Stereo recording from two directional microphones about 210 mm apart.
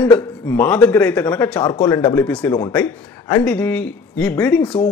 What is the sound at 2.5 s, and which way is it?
Speech, 20° left (ahead or behind).